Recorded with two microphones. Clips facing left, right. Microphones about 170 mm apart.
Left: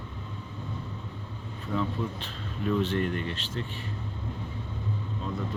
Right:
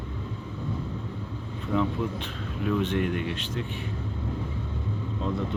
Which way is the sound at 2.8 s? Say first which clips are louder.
Right 2 dB; 15° right (ahead or behind).